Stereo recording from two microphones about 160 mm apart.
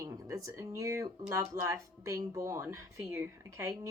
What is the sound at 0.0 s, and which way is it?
Speech, 20° right (ahead or behind).